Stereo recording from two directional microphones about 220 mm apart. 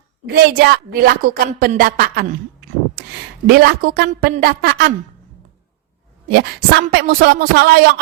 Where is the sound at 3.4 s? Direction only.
45° right (ahead or behind).